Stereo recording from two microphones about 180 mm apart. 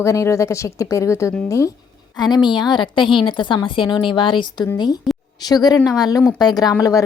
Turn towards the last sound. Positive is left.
turn(degrees=20)  # may be behind; listen again after turning